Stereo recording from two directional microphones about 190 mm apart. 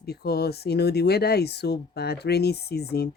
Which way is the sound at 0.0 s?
55° left (ahead or behind).